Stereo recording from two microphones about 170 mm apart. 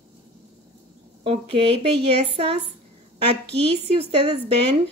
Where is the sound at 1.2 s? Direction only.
35° right (ahead or behind).